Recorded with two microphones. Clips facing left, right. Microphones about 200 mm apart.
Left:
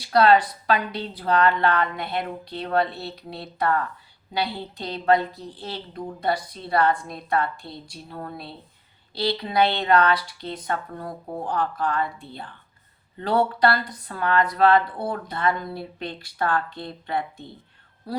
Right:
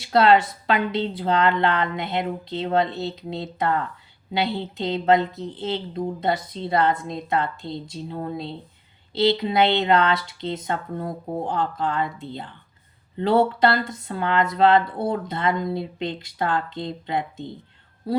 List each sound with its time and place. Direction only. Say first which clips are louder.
0.0 s speech: right 1 dB; 25° right (ahead or behind)